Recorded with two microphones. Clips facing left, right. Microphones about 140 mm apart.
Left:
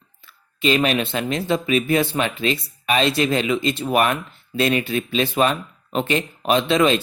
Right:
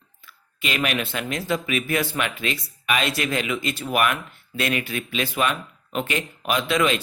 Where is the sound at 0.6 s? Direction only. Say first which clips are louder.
Left 7 dB; 30° left (ahead or behind).